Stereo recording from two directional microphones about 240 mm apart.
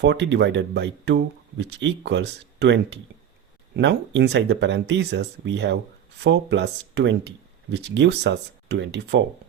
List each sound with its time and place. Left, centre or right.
0.0 s speech: right